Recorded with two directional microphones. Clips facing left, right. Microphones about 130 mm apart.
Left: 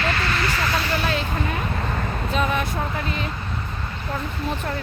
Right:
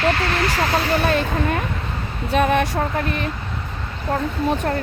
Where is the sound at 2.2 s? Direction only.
60° right (ahead or behind).